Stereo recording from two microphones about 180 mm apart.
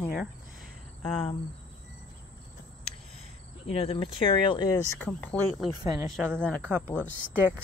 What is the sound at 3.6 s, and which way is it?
Speech, 30° left (ahead or behind).